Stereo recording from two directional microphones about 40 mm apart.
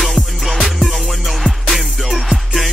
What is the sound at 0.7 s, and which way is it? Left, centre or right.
Music, centre.